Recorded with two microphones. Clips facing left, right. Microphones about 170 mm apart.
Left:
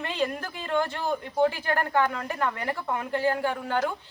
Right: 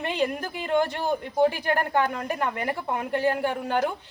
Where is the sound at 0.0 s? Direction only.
15° right (ahead or behind).